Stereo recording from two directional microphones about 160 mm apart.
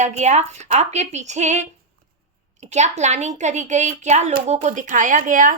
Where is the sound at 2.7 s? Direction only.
45° right (ahead or behind).